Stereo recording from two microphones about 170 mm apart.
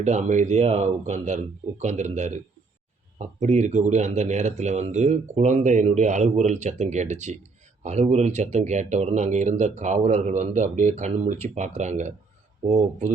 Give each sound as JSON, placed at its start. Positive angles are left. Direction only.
{"t": 0.0, "sound": "speech", "side_deg": -45}